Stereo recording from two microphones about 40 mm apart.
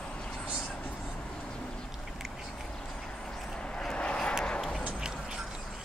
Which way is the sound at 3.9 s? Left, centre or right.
Left.